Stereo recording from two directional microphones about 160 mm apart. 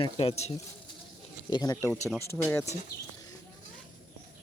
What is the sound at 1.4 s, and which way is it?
Speech, 25° left (ahead or behind).